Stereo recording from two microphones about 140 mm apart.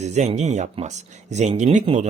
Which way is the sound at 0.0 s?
55° right (ahead or behind).